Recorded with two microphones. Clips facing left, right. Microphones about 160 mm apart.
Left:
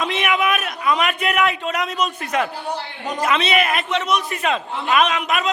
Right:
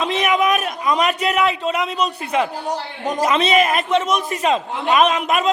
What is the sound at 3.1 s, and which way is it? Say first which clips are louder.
A man's voice: right 3 dB; 35° right (ahead or behind).